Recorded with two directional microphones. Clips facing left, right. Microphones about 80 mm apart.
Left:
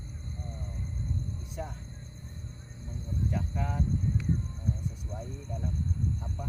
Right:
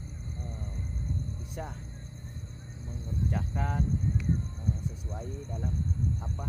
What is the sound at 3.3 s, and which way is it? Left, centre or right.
Speech, right.